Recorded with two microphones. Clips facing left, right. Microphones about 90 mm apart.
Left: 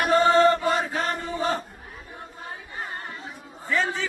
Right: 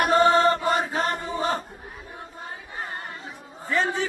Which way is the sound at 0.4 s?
30° right (ahead or behind).